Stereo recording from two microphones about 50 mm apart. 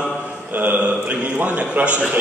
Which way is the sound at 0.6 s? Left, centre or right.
Right.